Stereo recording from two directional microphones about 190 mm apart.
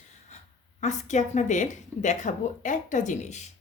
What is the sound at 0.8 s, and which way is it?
Speech, 40° left (ahead or behind).